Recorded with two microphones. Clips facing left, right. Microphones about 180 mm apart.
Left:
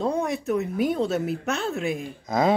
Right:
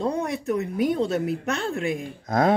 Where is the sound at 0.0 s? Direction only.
Centre (ahead or behind).